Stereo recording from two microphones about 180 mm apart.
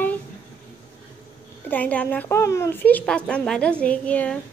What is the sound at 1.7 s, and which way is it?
A woman's voice, 10° left (ahead or behind).